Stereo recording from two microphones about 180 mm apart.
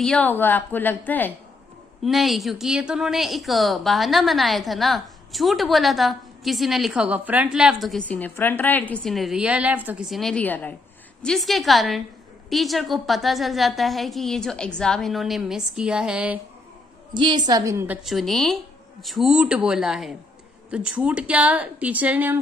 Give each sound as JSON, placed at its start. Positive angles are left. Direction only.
{"t": 0.0, "sound": "a woman's voice", "side_deg": 5}
{"t": 2.0, "sound": "a woman's voice", "side_deg": 0}
{"t": 17.1, "sound": "a woman's voice", "side_deg": -25}
{"t": 18.0, "sound": "a woman's voice", "side_deg": 0}